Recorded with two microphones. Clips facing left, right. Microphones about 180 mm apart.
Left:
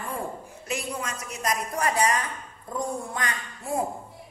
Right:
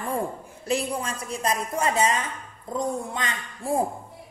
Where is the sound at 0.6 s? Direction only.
30° right (ahead or behind).